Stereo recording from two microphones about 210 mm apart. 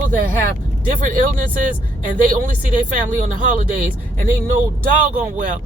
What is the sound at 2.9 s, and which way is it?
Speech, 40° right (ahead or behind).